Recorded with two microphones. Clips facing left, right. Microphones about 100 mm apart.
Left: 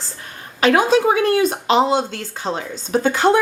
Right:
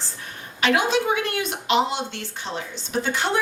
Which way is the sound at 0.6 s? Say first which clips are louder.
Left 6 dB; 40° left (ahead or behind).